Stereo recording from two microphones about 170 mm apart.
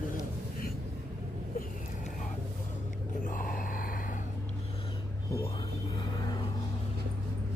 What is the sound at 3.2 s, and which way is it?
Gasp, 55° left (ahead or behind).